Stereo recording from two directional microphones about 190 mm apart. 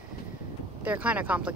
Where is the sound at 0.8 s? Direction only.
10° right (ahead or behind).